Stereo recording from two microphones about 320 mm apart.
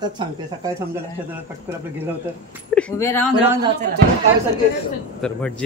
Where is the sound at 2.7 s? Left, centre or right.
Centre.